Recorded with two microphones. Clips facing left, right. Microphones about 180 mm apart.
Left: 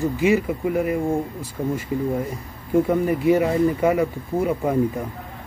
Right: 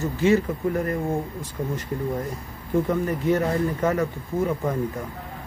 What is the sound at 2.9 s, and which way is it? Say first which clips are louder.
Speech: left 5 dB; 10° left (ahead or behind).